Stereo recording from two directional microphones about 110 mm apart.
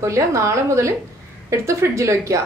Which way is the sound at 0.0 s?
30° right (ahead or behind).